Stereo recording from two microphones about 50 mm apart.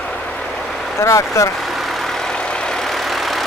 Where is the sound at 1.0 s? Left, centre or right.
Left.